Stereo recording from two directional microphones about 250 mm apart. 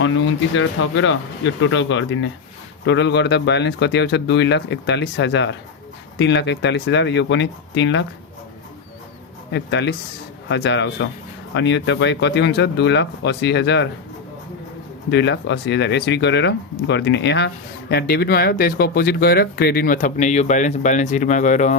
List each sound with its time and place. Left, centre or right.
0.0 s speech: left
9.5 s speech: left
15.1 s speech: left